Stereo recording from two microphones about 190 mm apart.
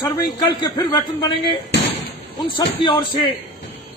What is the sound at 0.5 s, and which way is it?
A man's voice, 20° left (ahead or behind).